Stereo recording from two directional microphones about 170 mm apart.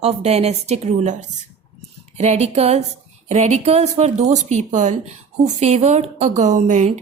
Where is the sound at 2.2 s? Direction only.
40° right (ahead or behind).